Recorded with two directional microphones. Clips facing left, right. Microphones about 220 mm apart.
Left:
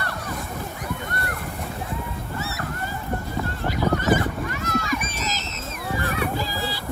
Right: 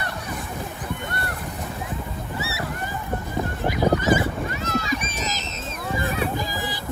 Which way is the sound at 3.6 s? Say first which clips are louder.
Right 2 dB; 15° right (ahead or behind).